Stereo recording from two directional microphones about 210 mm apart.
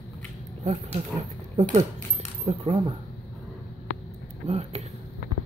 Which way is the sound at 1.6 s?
35° right (ahead or behind).